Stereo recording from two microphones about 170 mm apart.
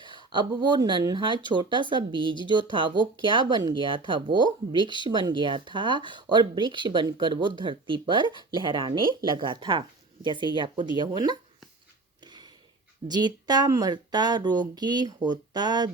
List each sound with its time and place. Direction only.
0.3 s speech: 25° right (ahead or behind)
12.2 s a sound: 25° right (ahead or behind)
13.1 s speech: 25° right (ahead or behind)